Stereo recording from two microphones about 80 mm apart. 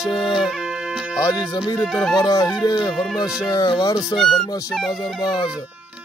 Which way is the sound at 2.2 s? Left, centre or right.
Left.